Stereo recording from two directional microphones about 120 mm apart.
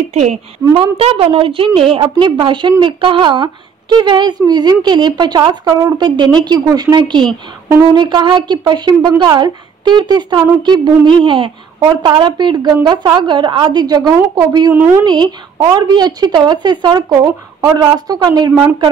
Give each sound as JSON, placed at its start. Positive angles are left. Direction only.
{"t": 0.1, "sound": "a woman's voice", "side_deg": -70}
{"t": 0.7, "sound": "a woman's voice", "side_deg": -50}
{"t": 14.7, "sound": "a woman's voice", "side_deg": -15}
{"t": 15.0, "sound": "speech", "side_deg": -35}
{"t": 17.1, "sound": "speech", "side_deg": -30}